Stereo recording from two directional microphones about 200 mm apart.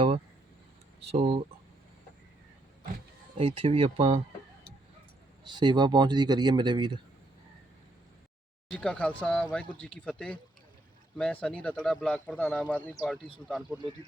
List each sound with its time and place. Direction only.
1.1 s speech: 30° right (ahead or behind)
3.3 s speech: 30° right (ahead or behind)
5.5 s speech: 20° right (ahead or behind)
8.7 s speech: 5° left (ahead or behind)